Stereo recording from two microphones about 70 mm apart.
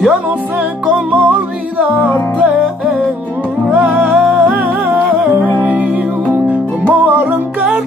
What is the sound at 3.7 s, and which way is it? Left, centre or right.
Music, right.